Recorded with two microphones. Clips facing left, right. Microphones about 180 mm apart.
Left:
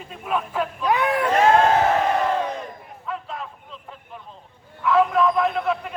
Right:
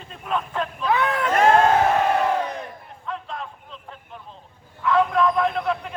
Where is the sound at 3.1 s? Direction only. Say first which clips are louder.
Even; 5° left (ahead or behind).